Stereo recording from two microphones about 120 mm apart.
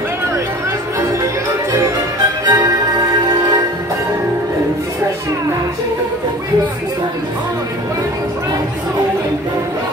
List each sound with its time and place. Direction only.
2.4 s music: 35° right (ahead or behind)